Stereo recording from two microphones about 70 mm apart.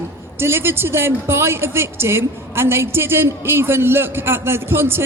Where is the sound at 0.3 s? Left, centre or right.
Right.